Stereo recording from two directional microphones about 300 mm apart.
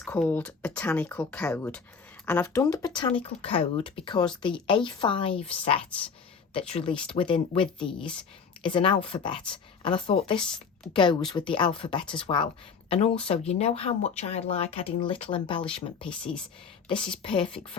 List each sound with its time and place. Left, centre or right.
0.0 s speech: centre
16.0 s speech: centre
17.2 s speech: centre